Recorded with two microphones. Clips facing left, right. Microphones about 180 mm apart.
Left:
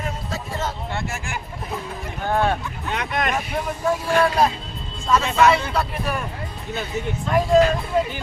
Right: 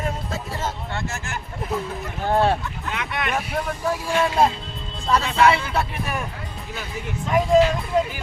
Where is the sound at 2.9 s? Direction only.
40° left (ahead or behind).